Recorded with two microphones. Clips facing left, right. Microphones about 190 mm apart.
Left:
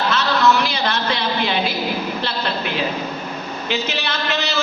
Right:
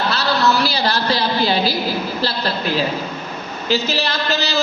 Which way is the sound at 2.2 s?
35° right (ahead or behind).